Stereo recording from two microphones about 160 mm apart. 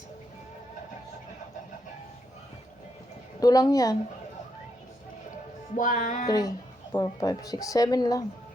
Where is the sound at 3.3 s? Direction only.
25° left (ahead or behind).